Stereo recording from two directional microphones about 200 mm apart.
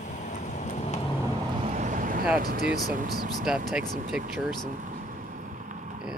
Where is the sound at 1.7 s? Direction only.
40° right (ahead or behind).